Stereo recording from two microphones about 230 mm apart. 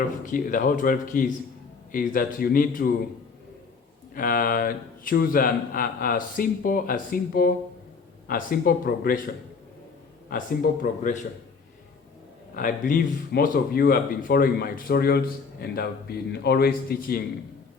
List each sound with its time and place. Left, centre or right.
0.3 s speech: left
4.1 s speech: left
10.2 s speech: left
12.5 s a man's voice: left